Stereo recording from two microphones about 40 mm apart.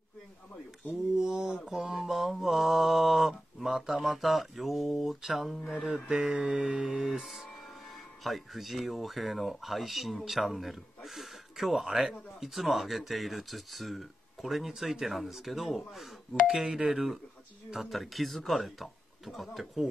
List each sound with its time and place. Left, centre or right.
1.1 s a sound: centre
2.0 s mantra: centre
6.3 s mantra: right
7.1 s speech: centre